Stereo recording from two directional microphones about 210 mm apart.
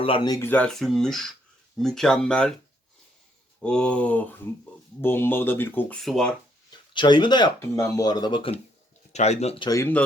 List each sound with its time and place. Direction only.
0.0 s speech: 25° left (ahead or behind)
0.3 s speech: 10° left (ahead or behind)
3.6 s speech: 5° left (ahead or behind)
6.7 s speech: 20° left (ahead or behind)
9.6 s speech: 10° left (ahead or behind)